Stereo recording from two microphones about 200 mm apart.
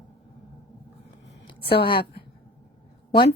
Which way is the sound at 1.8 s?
50° left (ahead or behind).